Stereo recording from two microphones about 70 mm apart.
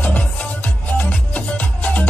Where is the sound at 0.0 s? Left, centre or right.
Centre.